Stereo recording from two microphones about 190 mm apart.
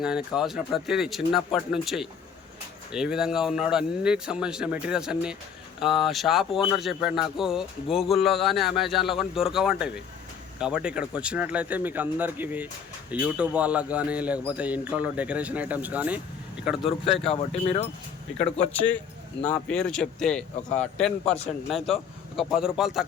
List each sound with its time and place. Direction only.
0.0 s a man's voice: 5° right (ahead or behind)
17.3 s speech: 35° left (ahead or behind)
19.4 s a man's voice: 5° left (ahead or behind)